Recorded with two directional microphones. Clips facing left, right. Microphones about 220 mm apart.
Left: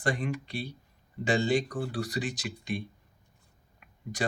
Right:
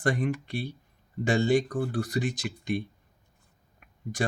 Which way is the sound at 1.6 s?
55° right (ahead or behind).